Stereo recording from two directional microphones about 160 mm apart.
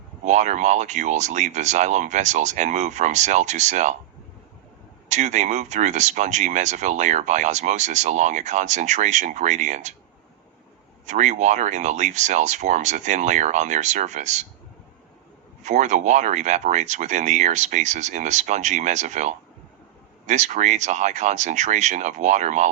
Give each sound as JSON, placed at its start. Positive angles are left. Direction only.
{"t": 0.3, "sound": "speech", "side_deg": -45}
{"t": 5.0, "sound": "speech", "side_deg": -50}
{"t": 11.0, "sound": "speech", "side_deg": -50}
{"t": 15.6, "sound": "speech", "side_deg": -50}